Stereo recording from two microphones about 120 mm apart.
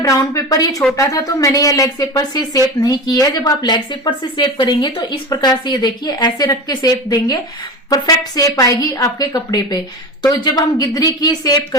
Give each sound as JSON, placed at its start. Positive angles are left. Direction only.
{"t": 0.0, "sound": "speech", "side_deg": 30}